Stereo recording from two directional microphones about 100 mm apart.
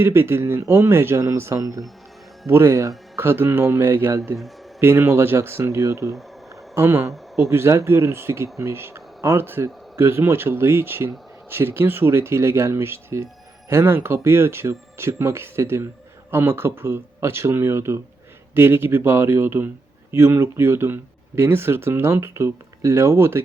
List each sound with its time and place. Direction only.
0.0 s speech: 25° right (ahead or behind)